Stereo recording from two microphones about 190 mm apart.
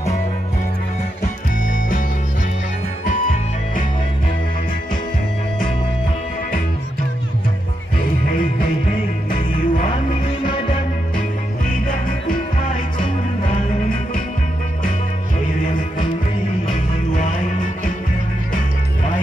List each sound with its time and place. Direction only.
9.3 s music: 45° left (ahead or behind)
17.1 s music: 40° left (ahead or behind)